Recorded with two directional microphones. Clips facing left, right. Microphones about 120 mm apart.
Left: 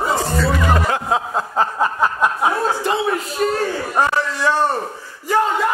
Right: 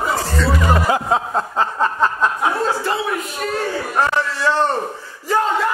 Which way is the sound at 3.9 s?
15° left (ahead or behind).